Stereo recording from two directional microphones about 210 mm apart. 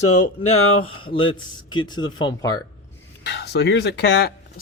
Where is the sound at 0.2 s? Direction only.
30° left (ahead or behind).